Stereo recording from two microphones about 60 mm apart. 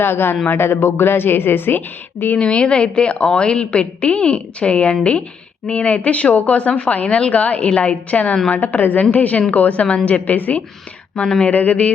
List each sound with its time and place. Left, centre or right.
0.0 s a woman's voice: left
2.4 s a woman's voice: centre
11.1 s a woman's voice: centre